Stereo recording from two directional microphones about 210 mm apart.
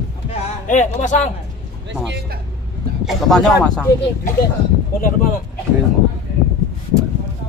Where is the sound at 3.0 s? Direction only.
Centre (ahead or behind).